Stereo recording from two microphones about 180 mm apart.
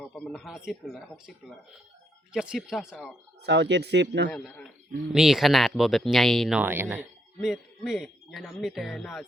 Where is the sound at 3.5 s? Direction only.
75° right (ahead or behind).